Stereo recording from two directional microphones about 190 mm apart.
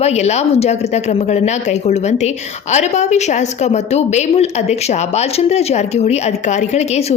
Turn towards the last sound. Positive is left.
turn(degrees=35)  # may be behind; listen again after turning